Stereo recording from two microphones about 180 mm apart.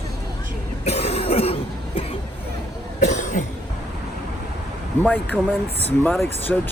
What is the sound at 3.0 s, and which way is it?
Cough, 40° left (ahead or behind).